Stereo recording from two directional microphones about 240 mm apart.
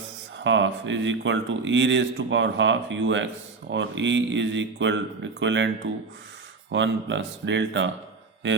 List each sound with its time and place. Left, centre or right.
0.4 s speech: right